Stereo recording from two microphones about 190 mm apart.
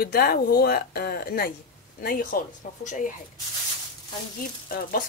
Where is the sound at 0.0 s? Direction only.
55° left (ahead or behind).